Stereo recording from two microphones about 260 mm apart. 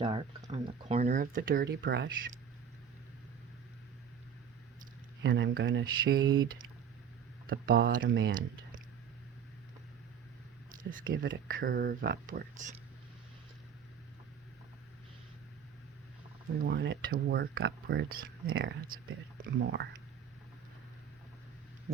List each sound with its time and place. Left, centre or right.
0.0 s speech: right
5.2 s speech: right
6.2 s speech: centre
7.4 s speech: right
10.7 s speech: right
16.6 s speech: right
18.4 s speech: right
19.4 s speech: right